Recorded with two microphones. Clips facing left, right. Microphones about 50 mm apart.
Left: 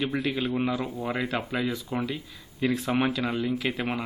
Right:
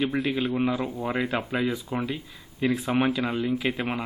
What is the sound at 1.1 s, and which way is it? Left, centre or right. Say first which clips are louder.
Speech: right 2 dB; centre.